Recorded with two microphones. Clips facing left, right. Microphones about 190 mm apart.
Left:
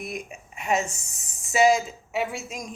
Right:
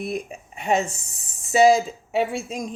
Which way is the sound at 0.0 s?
35° right (ahead or behind).